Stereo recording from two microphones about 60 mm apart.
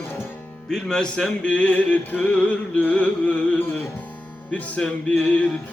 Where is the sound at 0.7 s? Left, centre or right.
Centre.